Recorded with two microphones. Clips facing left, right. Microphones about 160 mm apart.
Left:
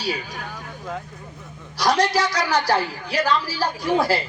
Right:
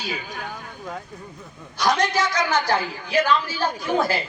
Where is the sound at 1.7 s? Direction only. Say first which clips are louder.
Left 2 dB; 35° left (ahead or behind).